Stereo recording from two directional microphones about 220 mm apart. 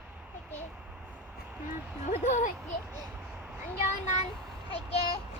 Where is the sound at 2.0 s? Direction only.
30° left (ahead or behind).